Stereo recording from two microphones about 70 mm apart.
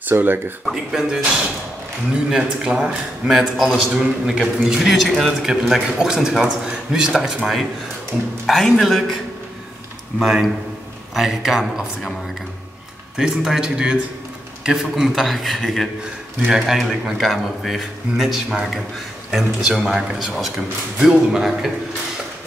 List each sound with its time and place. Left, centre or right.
0.0 s speech: right
0.7 s speech: centre
3.3 s a man's voice: centre
8.5 s a man's voice: centre
10.2 s a man's voice: centre
13.2 s a man's voice: centre
16.4 s a man's voice: centre
20.2 s a man's voice: centre